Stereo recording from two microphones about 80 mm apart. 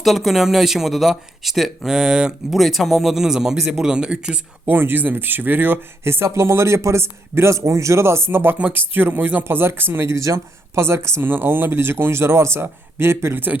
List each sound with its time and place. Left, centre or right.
0.0 s speech: centre
4.6 s a man's voice: right